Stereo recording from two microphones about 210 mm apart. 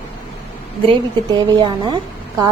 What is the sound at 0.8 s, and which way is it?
A woman's voice, 25° right (ahead or behind).